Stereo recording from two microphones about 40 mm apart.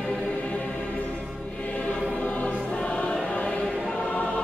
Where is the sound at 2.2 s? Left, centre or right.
Left.